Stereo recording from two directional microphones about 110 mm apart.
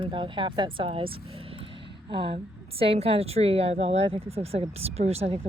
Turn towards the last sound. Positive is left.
turn(degrees=-70)  # may be behind; listen again after turning